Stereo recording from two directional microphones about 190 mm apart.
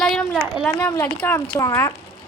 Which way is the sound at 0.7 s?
15° left (ahead or behind).